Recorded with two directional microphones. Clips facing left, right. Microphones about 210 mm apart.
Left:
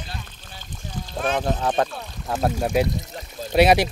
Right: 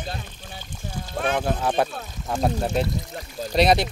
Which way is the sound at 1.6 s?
5° right (ahead or behind).